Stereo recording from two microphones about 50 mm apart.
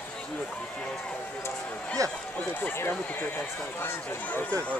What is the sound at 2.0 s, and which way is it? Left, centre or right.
Speech, right.